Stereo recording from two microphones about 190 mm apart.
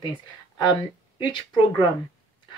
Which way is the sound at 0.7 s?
25° left (ahead or behind).